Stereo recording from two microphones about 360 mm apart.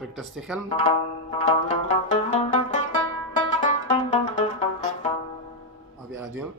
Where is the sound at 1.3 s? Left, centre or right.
Centre.